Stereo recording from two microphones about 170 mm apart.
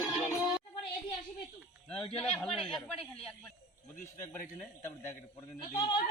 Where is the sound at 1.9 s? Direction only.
35° left (ahead or behind).